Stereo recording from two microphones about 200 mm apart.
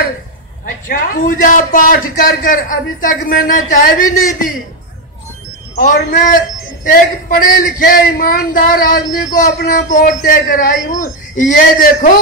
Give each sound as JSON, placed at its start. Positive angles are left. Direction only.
{"t": 0.8, "sound": "speech", "side_deg": 45}
{"t": 5.8, "sound": "speech", "side_deg": 45}